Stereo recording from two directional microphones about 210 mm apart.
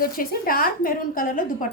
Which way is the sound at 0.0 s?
45° left (ahead or behind).